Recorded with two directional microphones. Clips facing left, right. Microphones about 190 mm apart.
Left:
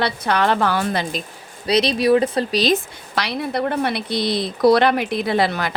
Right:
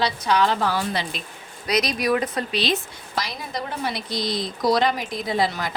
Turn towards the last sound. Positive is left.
turn(degrees=70)  # may be behind; listen again after turning